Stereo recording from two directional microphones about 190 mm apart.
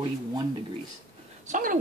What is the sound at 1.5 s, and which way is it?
Speech, 45° right (ahead or behind).